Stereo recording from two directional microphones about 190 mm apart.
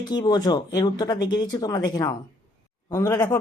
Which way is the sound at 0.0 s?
20° left (ahead or behind).